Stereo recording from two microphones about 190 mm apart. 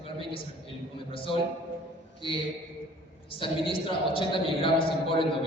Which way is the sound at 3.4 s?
30° left (ahead or behind).